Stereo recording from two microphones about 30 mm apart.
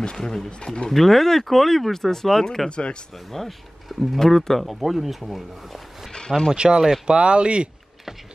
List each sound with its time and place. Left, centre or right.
0.2 s speech: centre
0.5 s speech: left
0.8 s speech: centre
2.7 s speech: left
3.3 s speech: centre
4.2 s speech: centre
6.5 s speech: right